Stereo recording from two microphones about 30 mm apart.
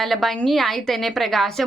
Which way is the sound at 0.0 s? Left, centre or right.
Centre.